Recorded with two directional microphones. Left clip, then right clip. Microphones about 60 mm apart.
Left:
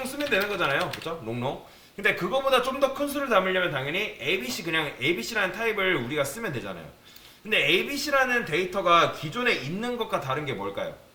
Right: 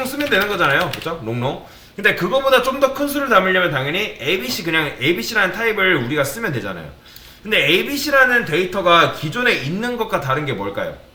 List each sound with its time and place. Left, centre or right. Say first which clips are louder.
0.2 s a man's voice: right 8 dB; right